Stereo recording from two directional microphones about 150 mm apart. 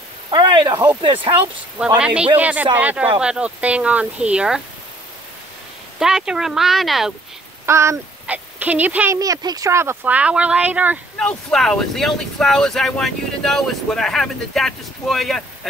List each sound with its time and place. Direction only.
0.3 s a sound: 30° right (ahead or behind)
1.0 s speech: 35° right (ahead or behind)
2.0 s speech: 10° right (ahead or behind)
5.9 s speech: 5° right (ahead or behind)
7.6 s speech: 20° right (ahead or behind)
9.2 s speech: 25° right (ahead or behind)
11.1 s speech: 5° left (ahead or behind)